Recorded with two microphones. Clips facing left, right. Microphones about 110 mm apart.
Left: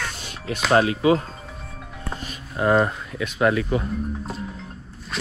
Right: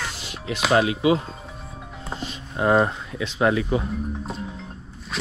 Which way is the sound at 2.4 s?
30° right (ahead or behind).